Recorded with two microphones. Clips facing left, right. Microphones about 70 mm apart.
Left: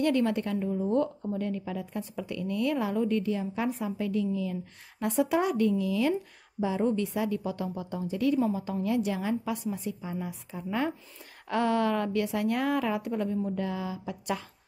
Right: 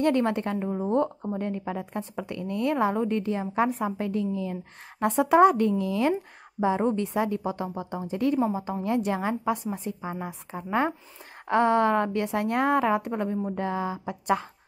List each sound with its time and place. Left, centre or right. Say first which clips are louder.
0.0 s a woman's voice: right 2 dB; right